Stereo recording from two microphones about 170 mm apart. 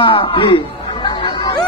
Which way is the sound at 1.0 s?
30° left (ahead or behind).